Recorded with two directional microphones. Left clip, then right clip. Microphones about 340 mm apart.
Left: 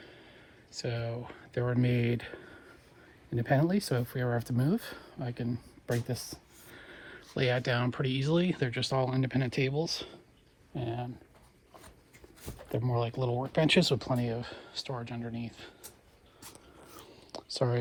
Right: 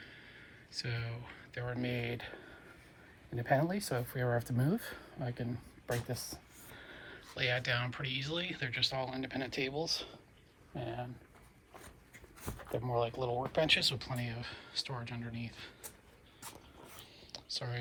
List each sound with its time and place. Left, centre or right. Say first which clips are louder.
0.0 s a sound: left 1 dB; centre
0.8 s speech: left 6 dB; centre
1.8 s speech: left 6 dB; centre
12.7 s speech: left 2 dB; left; by 15.9 s centre